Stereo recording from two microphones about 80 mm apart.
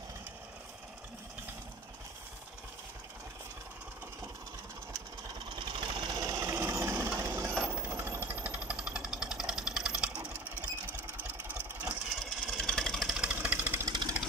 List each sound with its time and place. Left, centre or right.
5.6 s vehicle: right
6.1 s a sound: right
7.2 s coin: right
7.6 s jackhammer: right
10.9 s vehicle: right
12.2 s engine: centre
13.1 s vehicle: centre
13.8 s engine: right